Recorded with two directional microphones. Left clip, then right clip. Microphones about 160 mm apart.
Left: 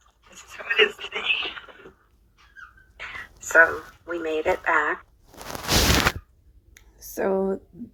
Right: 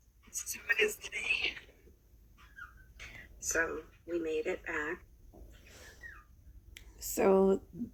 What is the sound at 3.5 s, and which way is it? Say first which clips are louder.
Speech: left 17 dB; 40° left (ahead or behind).